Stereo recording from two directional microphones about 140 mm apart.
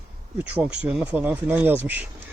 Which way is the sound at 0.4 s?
10° right (ahead or behind).